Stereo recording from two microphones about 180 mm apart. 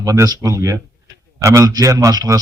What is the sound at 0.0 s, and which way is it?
A man's voice, 20° right (ahead or behind).